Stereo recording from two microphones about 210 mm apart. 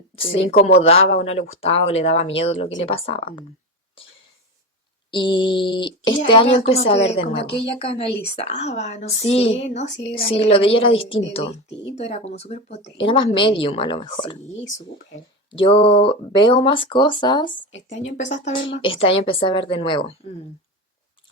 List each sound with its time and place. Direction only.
0.3 s a woman's voice: 30° left (ahead or behind)
5.1 s a woman's voice: 25° left (ahead or behind)
15.4 s a woman's voice: 25° left (ahead or behind)
17.8 s a woman's voice: 35° left (ahead or behind)